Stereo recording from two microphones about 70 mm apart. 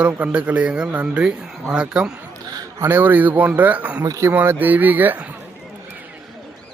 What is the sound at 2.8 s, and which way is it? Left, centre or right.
A man's voice, right.